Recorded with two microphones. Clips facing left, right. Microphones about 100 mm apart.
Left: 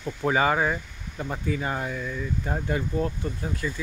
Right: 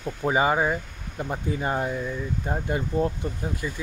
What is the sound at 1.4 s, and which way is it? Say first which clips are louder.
Speech: right 2 dB; 30° right (ahead or behind).